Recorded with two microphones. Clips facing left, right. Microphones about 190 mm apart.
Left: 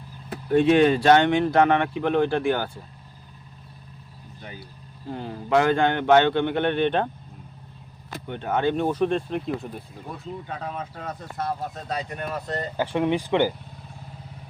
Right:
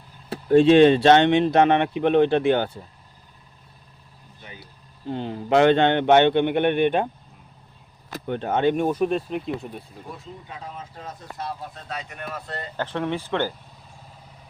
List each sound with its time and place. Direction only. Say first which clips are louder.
0.3 s speech: right 4 dB; 30° right (ahead or behind)
5.1 s speech: right 2 dB; 25° right (ahead or behind)
8.3 s speech: right 3 dB; 30° right (ahead or behind)
8.7 s speech: right 1 dB; 10° right (ahead or behind)
10.4 s speech: left 5 dB; 60° left (ahead or behind); by 12.6 s 40° left (ahead or behind)
12.7 s speech: left 3 dB; 10° left (ahead or behind)